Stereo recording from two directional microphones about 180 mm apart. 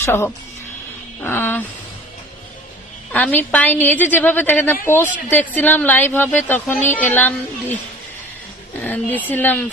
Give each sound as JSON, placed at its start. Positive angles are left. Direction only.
{"t": 0.0, "sound": "a woman's voice", "side_deg": 10}
{"t": 3.1, "sound": "a woman's voice", "side_deg": 10}
{"t": 8.8, "sound": "a woman's voice", "side_deg": 10}